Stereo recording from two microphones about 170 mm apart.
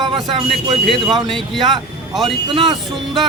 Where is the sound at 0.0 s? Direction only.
30° right (ahead or behind).